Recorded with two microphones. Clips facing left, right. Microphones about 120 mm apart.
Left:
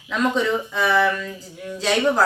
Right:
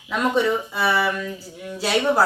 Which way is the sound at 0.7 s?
5° right (ahead or behind).